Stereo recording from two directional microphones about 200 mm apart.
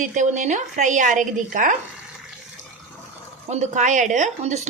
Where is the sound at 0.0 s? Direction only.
40° right (ahead or behind).